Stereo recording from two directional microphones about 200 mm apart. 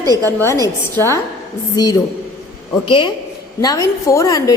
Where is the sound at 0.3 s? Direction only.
15° left (ahead or behind).